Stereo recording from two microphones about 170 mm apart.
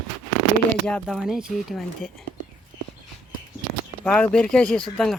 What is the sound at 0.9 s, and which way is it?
Speech, 5° left (ahead or behind).